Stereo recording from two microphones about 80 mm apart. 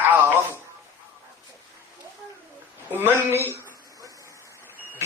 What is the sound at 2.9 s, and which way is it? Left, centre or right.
Speech, right.